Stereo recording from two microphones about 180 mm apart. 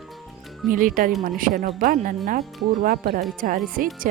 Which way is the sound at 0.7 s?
50° right (ahead or behind).